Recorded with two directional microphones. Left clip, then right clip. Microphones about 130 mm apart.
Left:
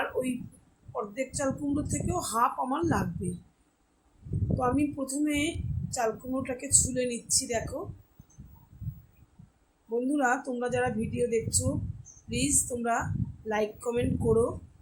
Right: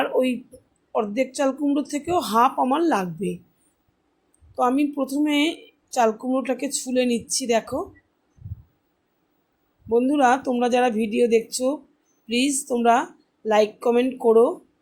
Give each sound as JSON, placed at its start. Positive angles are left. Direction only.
{"t": 0.0, "sound": "a sound", "side_deg": -60}
{"t": 0.9, "sound": "a woman's voice", "side_deg": -60}
{"t": 4.5, "sound": "a woman's voice", "side_deg": -65}
{"t": 9.9, "sound": "a woman's voice", "side_deg": -55}